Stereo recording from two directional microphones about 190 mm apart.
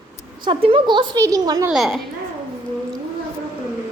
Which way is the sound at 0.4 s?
25° right (ahead or behind).